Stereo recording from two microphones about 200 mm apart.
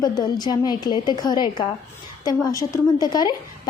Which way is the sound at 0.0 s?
20° left (ahead or behind).